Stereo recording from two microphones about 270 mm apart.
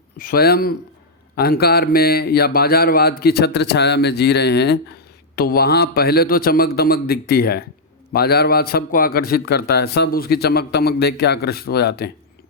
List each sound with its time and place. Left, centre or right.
0.2 s a man's voice: left